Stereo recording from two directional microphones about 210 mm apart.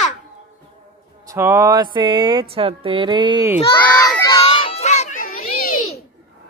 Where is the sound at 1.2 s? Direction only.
10° right (ahead or behind).